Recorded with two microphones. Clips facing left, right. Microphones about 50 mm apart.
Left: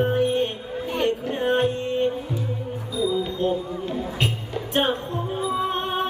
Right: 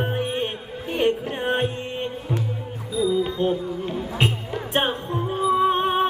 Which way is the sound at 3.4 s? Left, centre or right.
Right.